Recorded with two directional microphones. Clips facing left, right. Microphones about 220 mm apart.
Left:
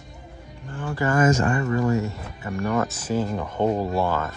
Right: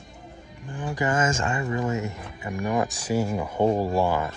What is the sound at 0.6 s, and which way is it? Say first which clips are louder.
Speech: left 1 dB; 15° right (ahead or behind).